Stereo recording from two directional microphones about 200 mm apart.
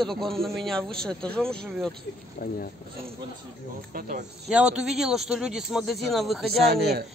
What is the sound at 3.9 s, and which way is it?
Speech, 45° right (ahead or behind).